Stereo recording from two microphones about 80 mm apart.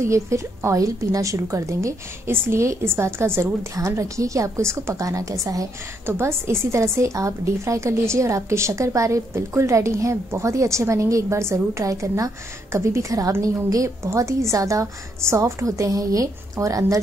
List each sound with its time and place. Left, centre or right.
0.0 s a woman's voice: right
6.0 s a woman's voice: right